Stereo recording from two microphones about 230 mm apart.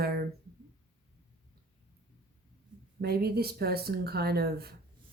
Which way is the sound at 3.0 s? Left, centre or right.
Right.